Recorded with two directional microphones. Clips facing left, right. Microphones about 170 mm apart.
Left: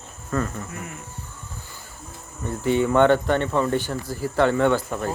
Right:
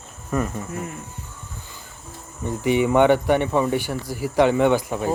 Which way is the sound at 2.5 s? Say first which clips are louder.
Right 1 dB; 15° right (ahead or behind).